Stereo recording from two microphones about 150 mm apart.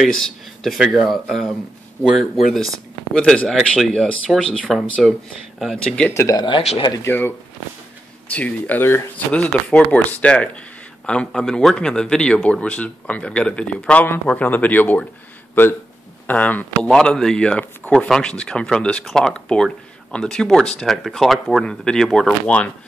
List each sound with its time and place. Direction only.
0.2 s speech: centre (ahead or behind)
3.2 s speech: 5° left (ahead or behind)
6.1 s speech: 25° left (ahead or behind)
7.0 s a man's voice: 15° left (ahead or behind)
16.3 s speech: 10° left (ahead or behind)